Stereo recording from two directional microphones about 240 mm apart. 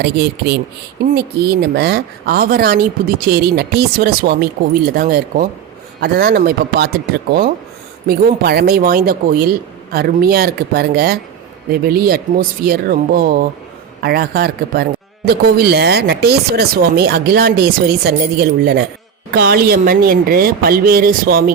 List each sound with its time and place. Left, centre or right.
0.0 s a woman's voice: right